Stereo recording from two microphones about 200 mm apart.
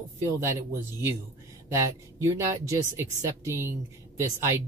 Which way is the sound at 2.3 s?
15° right (ahead or behind).